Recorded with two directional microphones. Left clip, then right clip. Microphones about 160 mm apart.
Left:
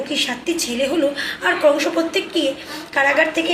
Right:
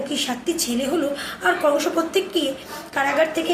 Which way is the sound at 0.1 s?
30° right (ahead or behind).